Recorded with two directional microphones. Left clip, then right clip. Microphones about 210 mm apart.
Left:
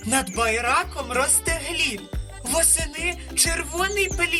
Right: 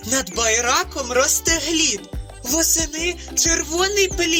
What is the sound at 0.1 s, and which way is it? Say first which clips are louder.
Music: right 2 dB; 15° right (ahead or behind).